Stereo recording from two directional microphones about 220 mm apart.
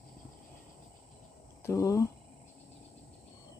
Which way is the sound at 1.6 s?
15° left (ahead or behind).